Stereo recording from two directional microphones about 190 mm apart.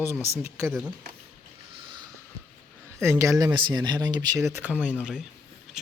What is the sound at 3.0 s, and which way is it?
Speech, 15° right (ahead or behind).